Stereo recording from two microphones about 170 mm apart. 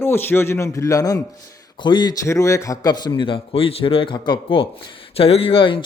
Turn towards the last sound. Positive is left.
turn(degrees=30)  # may be behind; listen again after turning